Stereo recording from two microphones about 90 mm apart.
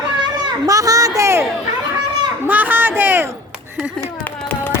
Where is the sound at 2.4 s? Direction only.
20° right (ahead or behind).